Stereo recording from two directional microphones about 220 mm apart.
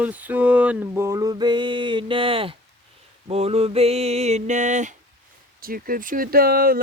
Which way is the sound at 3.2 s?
25° right (ahead or behind).